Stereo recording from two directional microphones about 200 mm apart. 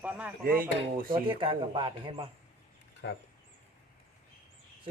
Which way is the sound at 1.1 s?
25° right (ahead or behind).